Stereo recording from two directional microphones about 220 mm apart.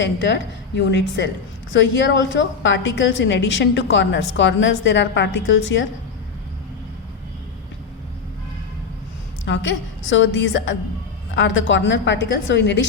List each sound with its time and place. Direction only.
0.0 s a woman's voice: 55° left (ahead or behind)
9.5 s a woman's voice: 55° left (ahead or behind)